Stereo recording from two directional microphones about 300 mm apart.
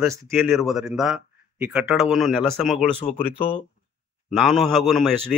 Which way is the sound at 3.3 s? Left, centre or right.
Centre.